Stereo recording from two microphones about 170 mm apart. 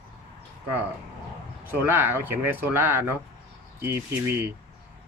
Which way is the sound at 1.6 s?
10° right (ahead or behind).